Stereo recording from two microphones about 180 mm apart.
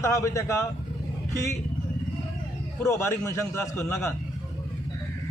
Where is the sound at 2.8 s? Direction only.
15° left (ahead or behind).